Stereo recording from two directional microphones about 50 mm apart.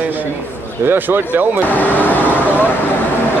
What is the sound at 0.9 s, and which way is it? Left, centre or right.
Speech, right.